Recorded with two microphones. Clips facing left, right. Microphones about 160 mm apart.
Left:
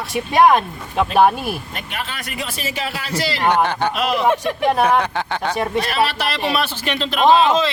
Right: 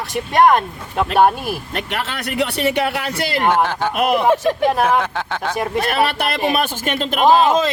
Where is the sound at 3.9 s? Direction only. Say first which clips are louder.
Right 4 dB; 55° right (ahead or behind).